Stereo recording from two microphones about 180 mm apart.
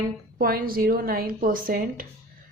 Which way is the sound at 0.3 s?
55° right (ahead or behind).